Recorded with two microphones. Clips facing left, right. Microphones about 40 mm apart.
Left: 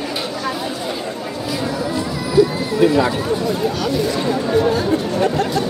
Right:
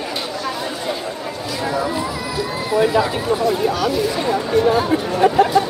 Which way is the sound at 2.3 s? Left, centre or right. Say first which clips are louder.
Left 5 dB; centre.